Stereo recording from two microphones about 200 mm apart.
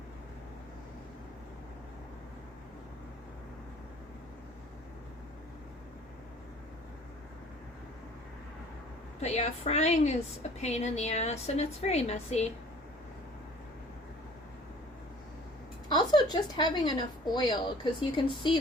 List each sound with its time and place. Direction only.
9.2 s a woman's voice: 30° left (ahead or behind)
15.9 s speech: 20° left (ahead or behind)